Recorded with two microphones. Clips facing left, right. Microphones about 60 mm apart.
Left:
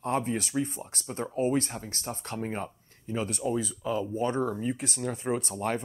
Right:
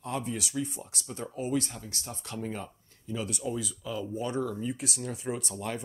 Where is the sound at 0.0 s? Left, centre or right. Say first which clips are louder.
Left 5 dB; left.